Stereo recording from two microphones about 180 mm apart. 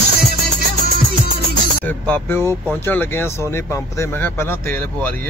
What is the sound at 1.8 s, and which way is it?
Speech, 10° left (ahead or behind).